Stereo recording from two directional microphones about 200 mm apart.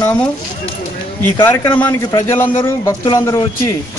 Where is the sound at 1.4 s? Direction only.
10° left (ahead or behind).